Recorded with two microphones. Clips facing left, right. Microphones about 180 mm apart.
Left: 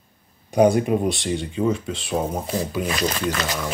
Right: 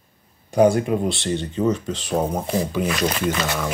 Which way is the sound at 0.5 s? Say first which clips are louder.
Even; 20° left (ahead or behind).